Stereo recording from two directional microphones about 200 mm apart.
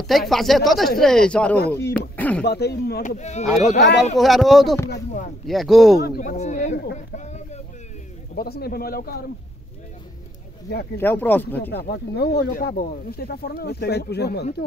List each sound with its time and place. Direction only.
0.0 s speech: centre (ahead or behind)
2.4 s speech: 55° left (ahead or behind)
3.0 s speech: 35° left (ahead or behind)
3.7 s speech: 60° left (ahead or behind)
4.0 s speech: centre (ahead or behind)
6.0 s speech: 45° left (ahead or behind)
7.2 s a sound: 35° left (ahead or behind)
8.4 s speech: 50° left (ahead or behind)
11.0 s speech: 10° left (ahead or behind)
11.7 s speech: 55° left (ahead or behind)